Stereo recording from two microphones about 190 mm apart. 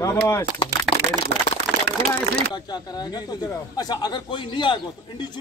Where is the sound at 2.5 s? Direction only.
20° left (ahead or behind).